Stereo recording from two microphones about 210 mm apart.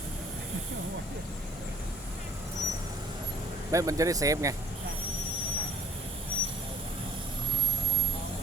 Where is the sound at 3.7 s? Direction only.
15° right (ahead or behind).